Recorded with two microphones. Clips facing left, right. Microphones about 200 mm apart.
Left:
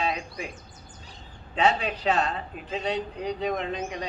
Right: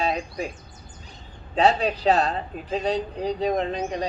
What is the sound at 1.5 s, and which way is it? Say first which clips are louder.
Speech: right 4 dB; 35° right (ahead or behind).